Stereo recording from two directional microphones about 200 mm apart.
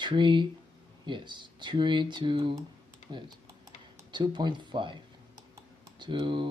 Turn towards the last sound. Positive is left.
turn(degrees=-25)  # may be behind; listen again after turning